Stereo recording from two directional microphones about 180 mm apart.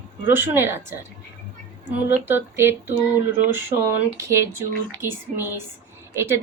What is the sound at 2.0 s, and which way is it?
Speech, 10° right (ahead or behind).